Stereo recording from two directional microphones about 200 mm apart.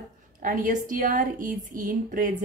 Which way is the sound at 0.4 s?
40° right (ahead or behind).